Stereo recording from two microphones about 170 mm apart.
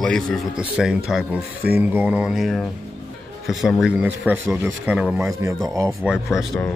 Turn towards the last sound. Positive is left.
turn(degrees=0)  # may be behind; listen again after turning